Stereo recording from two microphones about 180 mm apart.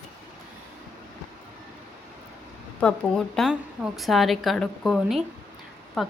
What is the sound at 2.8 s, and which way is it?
A woman's voice, 5° left (ahead or behind).